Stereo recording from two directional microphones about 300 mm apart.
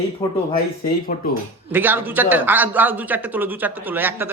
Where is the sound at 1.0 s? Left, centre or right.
Left.